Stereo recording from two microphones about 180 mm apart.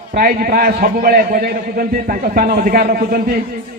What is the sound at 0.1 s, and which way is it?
A man's voice, 55° right (ahead or behind).